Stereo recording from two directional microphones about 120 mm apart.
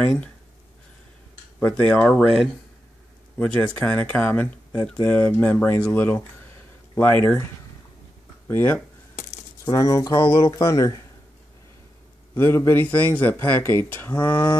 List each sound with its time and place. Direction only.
0.0 s speech: 10° left (ahead or behind)
1.6 s speech: 15° left (ahead or behind)
8.5 s speech: 15° left (ahead or behind)
12.4 s speech: 20° left (ahead or behind)